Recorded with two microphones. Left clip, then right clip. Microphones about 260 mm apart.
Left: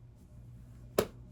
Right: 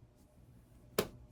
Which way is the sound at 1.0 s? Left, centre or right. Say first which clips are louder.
Left 5 dB; centre.